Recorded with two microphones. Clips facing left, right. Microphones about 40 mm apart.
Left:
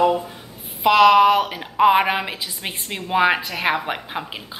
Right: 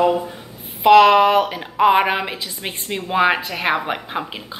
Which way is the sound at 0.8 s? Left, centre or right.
Centre.